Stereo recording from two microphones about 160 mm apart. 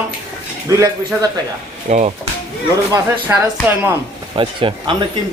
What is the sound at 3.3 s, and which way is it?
Speech, 15° right (ahead or behind).